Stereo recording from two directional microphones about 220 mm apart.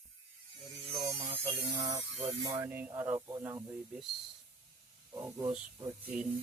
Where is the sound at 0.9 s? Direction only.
15° right (ahead or behind).